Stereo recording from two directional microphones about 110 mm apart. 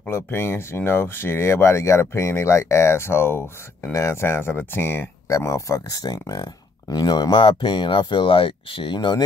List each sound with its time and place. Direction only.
0.0 s speech: 20° left (ahead or behind); by 9.2 s 45° left (ahead or behind)